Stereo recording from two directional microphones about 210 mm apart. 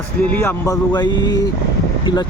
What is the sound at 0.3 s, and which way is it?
Speech, 15° left (ahead or behind).